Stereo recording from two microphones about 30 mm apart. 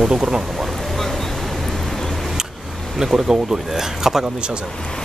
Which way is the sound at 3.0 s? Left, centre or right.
Centre.